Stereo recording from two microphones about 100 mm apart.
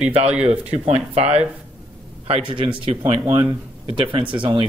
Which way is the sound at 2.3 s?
60° right (ahead or behind).